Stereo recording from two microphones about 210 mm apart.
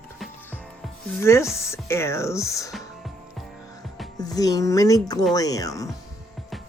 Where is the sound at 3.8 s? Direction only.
Centre (ahead or behind).